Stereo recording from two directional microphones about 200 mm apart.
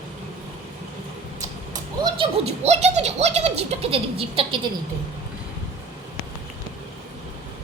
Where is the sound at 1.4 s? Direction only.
20° right (ahead or behind).